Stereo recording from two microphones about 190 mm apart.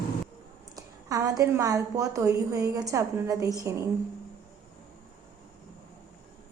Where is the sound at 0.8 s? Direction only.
20° right (ahead or behind).